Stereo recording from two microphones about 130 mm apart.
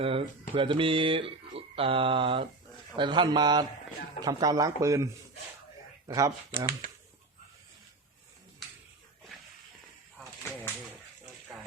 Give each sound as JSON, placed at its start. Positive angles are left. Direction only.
{"t": 0.0, "sound": "speech", "side_deg": -45}
{"t": 6.1, "sound": "speech", "side_deg": -25}